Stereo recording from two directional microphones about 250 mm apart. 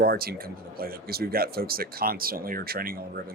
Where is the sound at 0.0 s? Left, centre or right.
Right.